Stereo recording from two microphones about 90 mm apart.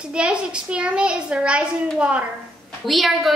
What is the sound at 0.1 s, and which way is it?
A child's voice, 10° right (ahead or behind).